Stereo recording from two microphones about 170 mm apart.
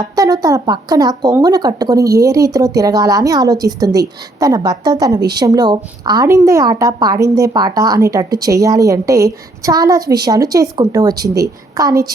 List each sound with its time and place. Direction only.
0.0 s a woman's voice: 20° right (ahead or behind)